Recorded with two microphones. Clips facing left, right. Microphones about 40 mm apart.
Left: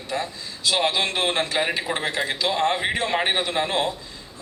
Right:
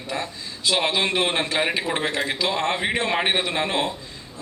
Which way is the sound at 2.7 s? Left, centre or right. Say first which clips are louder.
Even; centre.